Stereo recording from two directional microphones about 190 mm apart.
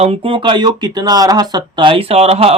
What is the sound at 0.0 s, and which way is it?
Speech, 30° right (ahead or behind).